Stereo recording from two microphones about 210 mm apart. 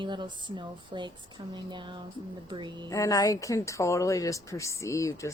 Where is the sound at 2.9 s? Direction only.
15° left (ahead or behind).